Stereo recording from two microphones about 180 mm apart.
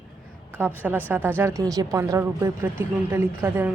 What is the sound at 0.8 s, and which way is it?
Speech, 10° right (ahead or behind).